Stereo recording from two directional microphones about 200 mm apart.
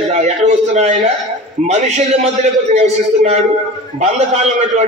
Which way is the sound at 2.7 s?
35° right (ahead or behind).